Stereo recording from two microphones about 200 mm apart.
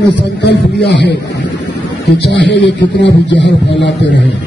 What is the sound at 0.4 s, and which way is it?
A man's voice, 60° left (ahead or behind).